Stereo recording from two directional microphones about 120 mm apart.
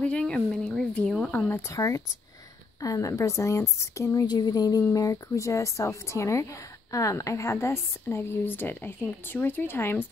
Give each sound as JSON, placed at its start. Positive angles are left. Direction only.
{"t": 0.0, "sound": "speech", "side_deg": 10}
{"t": 1.5, "sound": "a woman's voice", "side_deg": 25}